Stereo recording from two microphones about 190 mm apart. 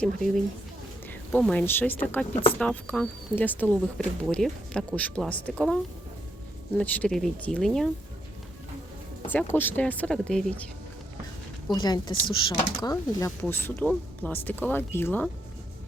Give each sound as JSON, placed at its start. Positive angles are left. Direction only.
{"t": 1.1, "sound": "speech", "side_deg": 5}
{"t": 2.3, "sound": "speech", "side_deg": 30}
{"t": 2.6, "sound": "speech", "side_deg": 5}
{"t": 9.3, "sound": "speech", "side_deg": 10}
{"t": 11.7, "sound": "speech", "side_deg": 20}